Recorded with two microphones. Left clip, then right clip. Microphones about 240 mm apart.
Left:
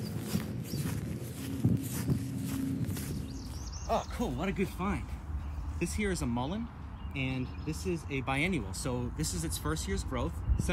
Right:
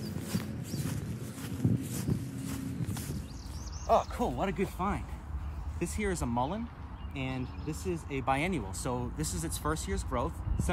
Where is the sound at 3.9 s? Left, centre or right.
Right.